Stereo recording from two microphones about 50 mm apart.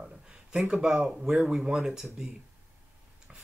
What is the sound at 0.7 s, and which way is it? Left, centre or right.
Speech, centre.